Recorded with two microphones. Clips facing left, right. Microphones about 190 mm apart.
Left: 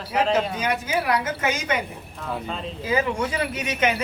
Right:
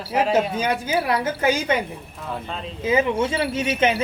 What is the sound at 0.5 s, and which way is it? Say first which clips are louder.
A woman's voice: right 2 dB; 30° right (ahead or behind).